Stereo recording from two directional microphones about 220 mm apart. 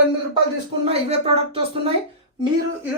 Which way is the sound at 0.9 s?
25° right (ahead or behind).